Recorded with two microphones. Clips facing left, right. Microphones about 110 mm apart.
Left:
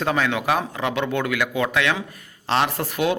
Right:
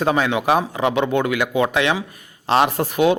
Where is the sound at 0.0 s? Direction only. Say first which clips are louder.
Right 4 dB; 20° right (ahead or behind).